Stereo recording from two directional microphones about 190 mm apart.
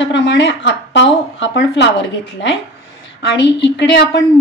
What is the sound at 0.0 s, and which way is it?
Speech, 70° left (ahead or behind).